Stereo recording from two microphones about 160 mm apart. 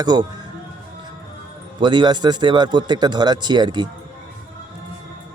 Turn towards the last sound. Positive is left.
turn(degrees=-30)  # may be behind; listen again after turning